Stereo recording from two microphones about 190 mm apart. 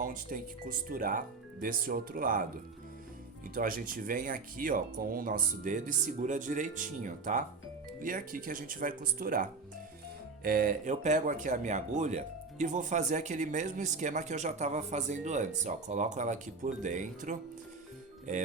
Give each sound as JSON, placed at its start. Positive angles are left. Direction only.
{"t": 0.0, "sound": "speech", "side_deg": -45}
{"t": 3.5, "sound": "speech", "side_deg": -50}